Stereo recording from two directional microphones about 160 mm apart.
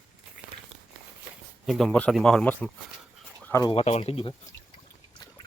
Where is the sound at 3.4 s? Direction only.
15° left (ahead or behind).